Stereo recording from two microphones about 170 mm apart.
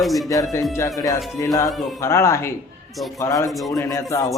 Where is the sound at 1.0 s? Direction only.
20° left (ahead or behind).